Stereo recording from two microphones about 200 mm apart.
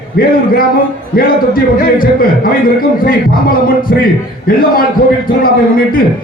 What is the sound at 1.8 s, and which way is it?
A man's voice, 45° left (ahead or behind).